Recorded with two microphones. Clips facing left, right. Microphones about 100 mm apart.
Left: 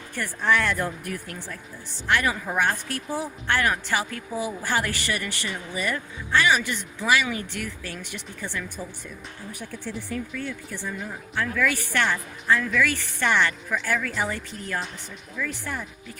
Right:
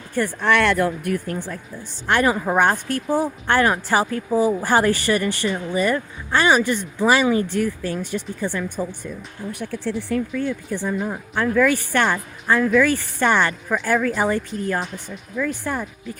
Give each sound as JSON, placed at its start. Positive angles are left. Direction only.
{"t": 0.4, "sound": "speech", "side_deg": -75}
{"t": 2.0, "sound": "a woman's voice", "side_deg": -40}
{"t": 2.5, "sound": "a woman's voice", "side_deg": -50}
{"t": 3.6, "sound": "speech", "side_deg": -35}
{"t": 8.4, "sound": "a woman's voice", "side_deg": -50}
{"t": 9.5, "sound": "speech", "side_deg": -70}
{"t": 10.2, "sound": "a woman's voice", "side_deg": -45}